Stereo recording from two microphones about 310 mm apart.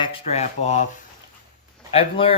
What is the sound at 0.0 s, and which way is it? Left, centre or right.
Speech, centre.